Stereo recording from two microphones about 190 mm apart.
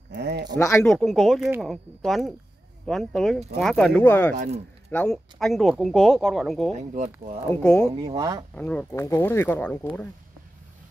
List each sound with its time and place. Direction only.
0.1 s a sound: 60° right (ahead or behind)
0.6 s speech: 15° left (ahead or behind)
0.8 s speech: centre (ahead or behind)
6.7 s speech: 40° right (ahead or behind)
7.6 s speech: 5° left (ahead or behind)
7.9 s speech: 25° right (ahead or behind)
8.5 s speech: 5° left (ahead or behind)